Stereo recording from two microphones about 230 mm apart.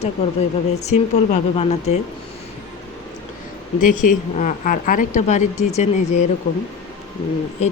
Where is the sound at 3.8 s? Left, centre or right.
Left.